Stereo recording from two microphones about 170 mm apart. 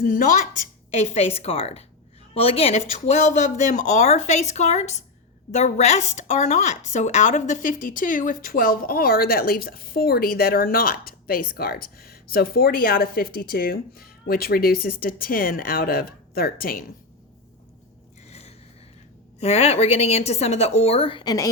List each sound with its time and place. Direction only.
0.0 s a woman's voice: 50° left (ahead or behind)
18.3 s a sound: 40° left (ahead or behind)
19.4 s a woman's voice: 40° left (ahead or behind); by 21.5 s 20° left (ahead or behind)